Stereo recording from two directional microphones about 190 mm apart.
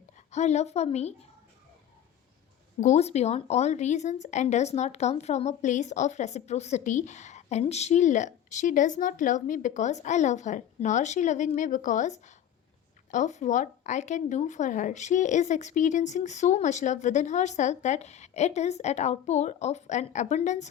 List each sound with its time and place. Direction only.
0.3 s speech: 35° left (ahead or behind)
2.8 s speech: 35° left (ahead or behind)